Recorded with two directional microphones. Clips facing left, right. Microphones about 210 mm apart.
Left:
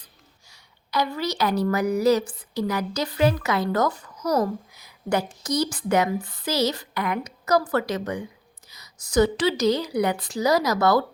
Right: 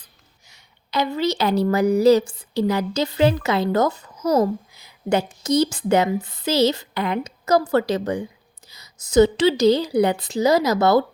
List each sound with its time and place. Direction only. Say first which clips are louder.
0.5 s a woman's voice: right 2 dB; 25° right (ahead or behind)